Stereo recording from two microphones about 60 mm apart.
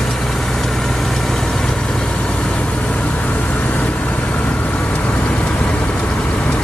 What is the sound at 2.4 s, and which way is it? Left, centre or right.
Vehicle, left.